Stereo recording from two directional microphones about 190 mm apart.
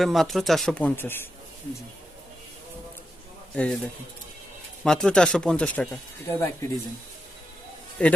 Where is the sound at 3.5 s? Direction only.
5° left (ahead or behind).